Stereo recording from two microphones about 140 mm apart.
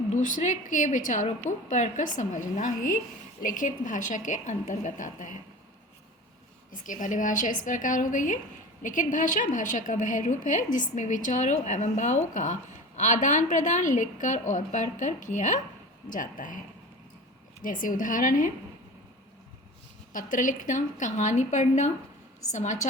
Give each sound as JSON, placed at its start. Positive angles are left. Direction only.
{"t": 0.1, "sound": "a woman's voice", "side_deg": 65}
{"t": 6.7, "sound": "a woman's voice", "side_deg": 65}
{"t": 17.6, "sound": "a woman's voice", "side_deg": 75}
{"t": 20.1, "sound": "a woman's voice", "side_deg": 70}